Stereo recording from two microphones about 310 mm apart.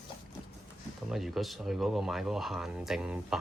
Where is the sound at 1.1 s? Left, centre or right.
Centre.